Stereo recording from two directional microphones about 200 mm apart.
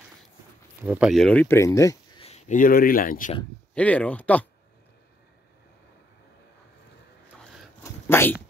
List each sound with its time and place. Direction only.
0.8 s speech: 5° right (ahead or behind); by 2.0 s 15° left (ahead or behind)
2.1 s speech: 30° left (ahead or behind)
3.7 s speech: 5° left (ahead or behind)
7.8 s a sound: 10° left (ahead or behind)